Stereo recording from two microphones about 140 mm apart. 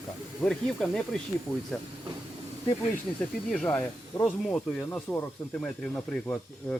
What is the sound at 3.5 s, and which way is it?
Speech, 10° left (ahead or behind).